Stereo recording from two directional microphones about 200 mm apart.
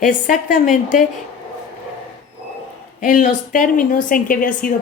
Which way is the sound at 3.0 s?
40° left (ahead or behind).